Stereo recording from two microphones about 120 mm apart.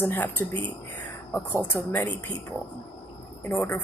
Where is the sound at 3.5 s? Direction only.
15° left (ahead or behind).